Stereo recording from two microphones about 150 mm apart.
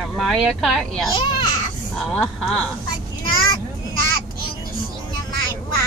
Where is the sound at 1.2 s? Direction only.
30° left (ahead or behind).